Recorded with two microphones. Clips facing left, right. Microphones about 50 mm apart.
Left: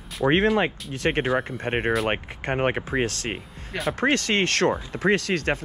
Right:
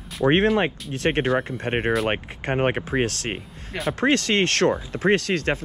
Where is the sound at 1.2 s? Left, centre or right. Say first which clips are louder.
Right 2 dB; centre.